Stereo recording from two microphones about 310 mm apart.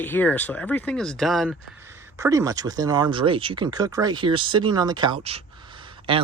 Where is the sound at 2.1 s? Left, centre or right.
Centre.